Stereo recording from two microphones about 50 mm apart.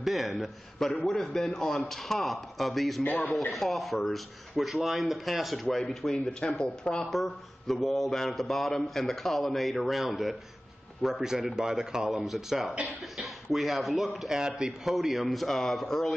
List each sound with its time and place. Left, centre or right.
0.0 s speech: centre
6.4 s speech: centre
7.1 s speech: centre
14.3 s speech: centre
15.0 s speech: centre